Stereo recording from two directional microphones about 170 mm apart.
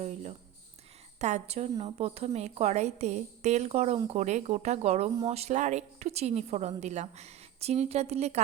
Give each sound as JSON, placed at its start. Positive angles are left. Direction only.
{"t": 0.0, "sound": "a woman's voice", "side_deg": -40}